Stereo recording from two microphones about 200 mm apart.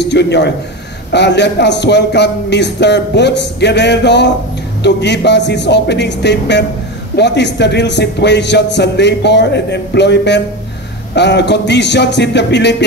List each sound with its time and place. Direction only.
0.0 s a man's voice: 60° left (ahead or behind)